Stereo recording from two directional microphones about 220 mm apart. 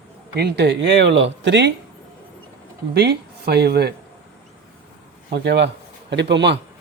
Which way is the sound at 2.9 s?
45° right (ahead or behind).